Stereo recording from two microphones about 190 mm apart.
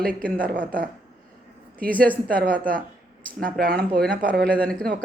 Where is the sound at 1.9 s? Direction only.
5° left (ahead or behind).